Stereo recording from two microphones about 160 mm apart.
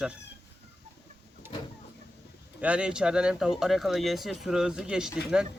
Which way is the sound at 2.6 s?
5° right (ahead or behind).